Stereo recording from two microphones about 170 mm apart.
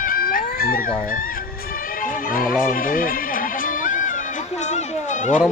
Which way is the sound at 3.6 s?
50° left (ahead or behind).